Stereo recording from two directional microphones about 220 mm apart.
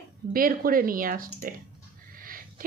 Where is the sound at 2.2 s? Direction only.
40° right (ahead or behind).